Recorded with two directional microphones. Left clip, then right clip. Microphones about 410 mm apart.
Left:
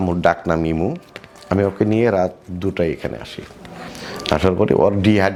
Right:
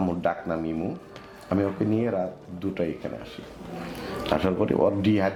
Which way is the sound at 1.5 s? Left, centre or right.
Left.